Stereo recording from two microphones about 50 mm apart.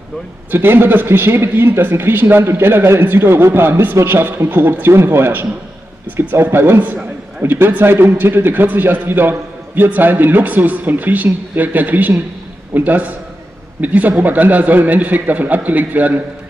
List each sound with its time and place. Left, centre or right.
0.5 s a man's voice: right